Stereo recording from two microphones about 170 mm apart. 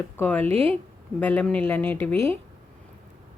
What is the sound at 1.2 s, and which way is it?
A woman's voice, 10° left (ahead or behind).